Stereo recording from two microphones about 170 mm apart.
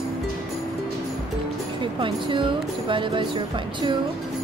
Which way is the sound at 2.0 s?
30° right (ahead or behind).